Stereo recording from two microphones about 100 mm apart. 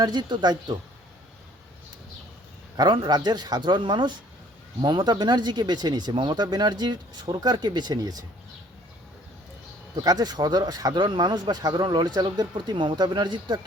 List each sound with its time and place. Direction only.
0.0 s speech: 50° right (ahead or behind)
2.7 s speech: 45° right (ahead or behind)
9.9 s speech: 40° right (ahead or behind)